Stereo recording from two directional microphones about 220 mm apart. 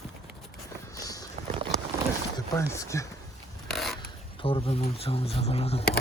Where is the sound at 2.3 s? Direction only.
15° left (ahead or behind).